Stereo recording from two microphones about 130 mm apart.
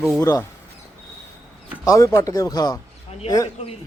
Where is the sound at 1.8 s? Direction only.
25° left (ahead or behind).